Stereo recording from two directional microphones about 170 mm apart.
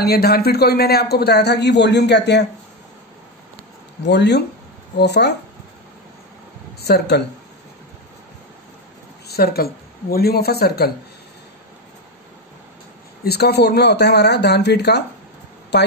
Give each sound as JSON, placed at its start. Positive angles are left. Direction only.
{"t": 0.0, "sound": "speech", "side_deg": 70}
{"t": 4.0, "sound": "speech", "side_deg": 90}
{"t": 4.9, "sound": "speech", "side_deg": 80}
{"t": 6.8, "sound": "speech", "side_deg": 70}
{"t": 9.3, "sound": "a woman's voice", "side_deg": 65}
{"t": 13.2, "sound": "speech", "side_deg": 70}
{"t": 15.7, "sound": "a woman's voice", "side_deg": 90}